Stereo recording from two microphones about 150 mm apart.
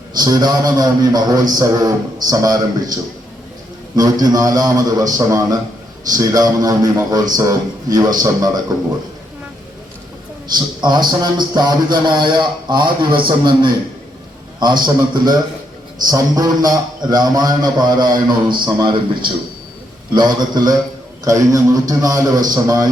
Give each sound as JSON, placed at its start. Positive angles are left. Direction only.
{"t": 0.2, "sound": "a man's voice", "side_deg": -25}
{"t": 10.8, "sound": "a man's voice", "side_deg": -30}